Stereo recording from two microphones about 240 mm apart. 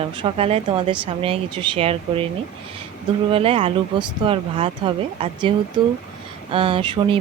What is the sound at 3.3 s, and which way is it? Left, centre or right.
Speech, right.